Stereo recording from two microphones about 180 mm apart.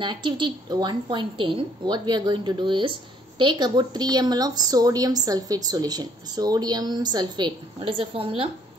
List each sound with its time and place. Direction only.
0.0 s a woman's voice: 25° right (ahead or behind)